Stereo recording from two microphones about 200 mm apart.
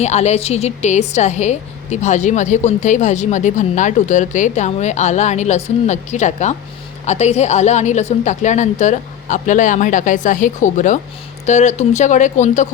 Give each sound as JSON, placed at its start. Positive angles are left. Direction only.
{"t": 0.0, "sound": "a woman's voice", "side_deg": 35}